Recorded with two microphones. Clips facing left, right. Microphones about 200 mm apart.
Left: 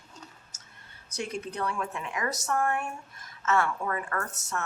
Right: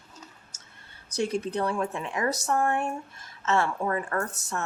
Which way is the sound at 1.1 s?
35° right (ahead or behind).